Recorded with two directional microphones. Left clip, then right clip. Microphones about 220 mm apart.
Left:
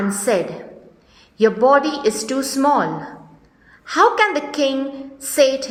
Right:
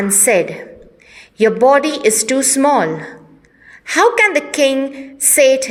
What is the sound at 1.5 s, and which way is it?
A woman's voice, 30° right (ahead or behind).